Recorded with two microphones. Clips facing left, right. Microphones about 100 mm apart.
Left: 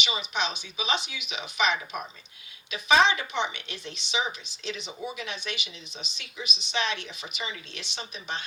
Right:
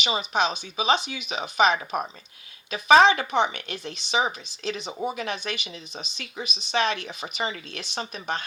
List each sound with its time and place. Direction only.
0.0 s speech: 40° right (ahead or behind)